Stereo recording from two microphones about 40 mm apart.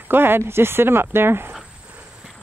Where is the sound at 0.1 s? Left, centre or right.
Right.